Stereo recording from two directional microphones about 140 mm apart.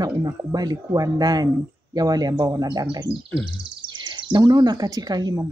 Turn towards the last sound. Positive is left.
turn(degrees=-25)  # may be behind; listen again after turning